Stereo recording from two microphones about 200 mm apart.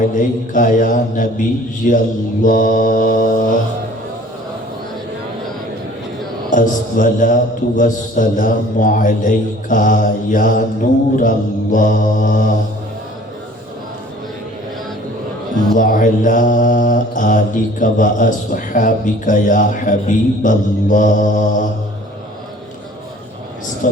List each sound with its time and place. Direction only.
0.0 s mantra: 40° left (ahead or behind)
6.5 s mantra: 40° left (ahead or behind)
15.7 s mantra: 40° left (ahead or behind)
23.8 s a man's voice: 40° left (ahead or behind)